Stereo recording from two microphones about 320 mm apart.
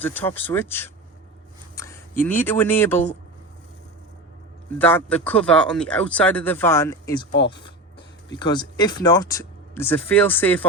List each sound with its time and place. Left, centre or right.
0.0 s speech: centre
4.8 s speech: centre
7.3 s speech: left
8.3 s speech: centre